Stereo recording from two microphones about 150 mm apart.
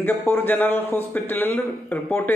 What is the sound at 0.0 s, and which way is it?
A man's voice, 10° left (ahead or behind).